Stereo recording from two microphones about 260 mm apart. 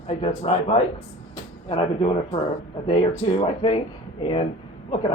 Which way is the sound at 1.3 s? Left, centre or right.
Centre.